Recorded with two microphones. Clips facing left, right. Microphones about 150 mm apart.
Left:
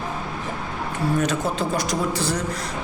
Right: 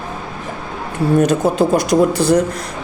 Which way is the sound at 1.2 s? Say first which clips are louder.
Right 9 dB; 50° right (ahead or behind).